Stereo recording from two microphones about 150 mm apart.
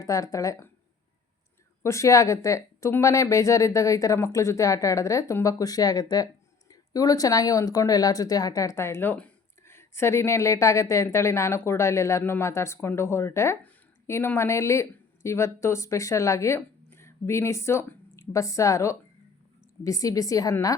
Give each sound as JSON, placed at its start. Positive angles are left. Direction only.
{"t": 0.0, "sound": "speech", "side_deg": 20}
{"t": 1.8, "sound": "speech", "side_deg": 20}